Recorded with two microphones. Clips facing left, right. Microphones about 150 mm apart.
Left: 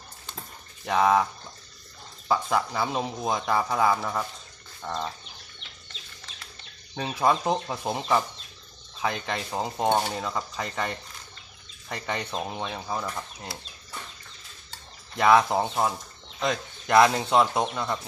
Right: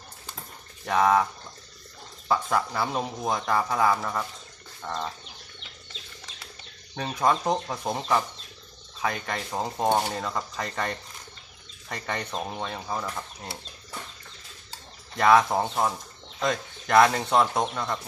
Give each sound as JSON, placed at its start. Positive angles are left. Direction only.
{"t": 0.9, "sound": "speech", "side_deg": 10}
{"t": 5.9, "sound": "bird", "side_deg": -25}
{"t": 6.9, "sound": "speech", "side_deg": 5}
{"t": 9.3, "sound": "speech", "side_deg": 5}
{"t": 9.9, "sound": "cutlery", "side_deg": -5}
{"t": 10.2, "sound": "speech", "side_deg": 5}
{"t": 15.1, "sound": "speech", "side_deg": 5}